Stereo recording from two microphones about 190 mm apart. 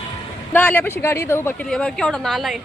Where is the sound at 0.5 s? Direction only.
10° left (ahead or behind).